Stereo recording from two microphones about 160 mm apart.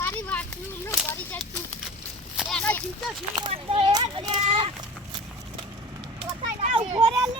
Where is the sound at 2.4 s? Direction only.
Centre (ahead or behind).